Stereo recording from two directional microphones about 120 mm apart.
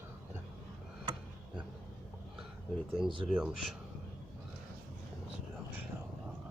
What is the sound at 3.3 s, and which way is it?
Speech, 5° right (ahead or behind).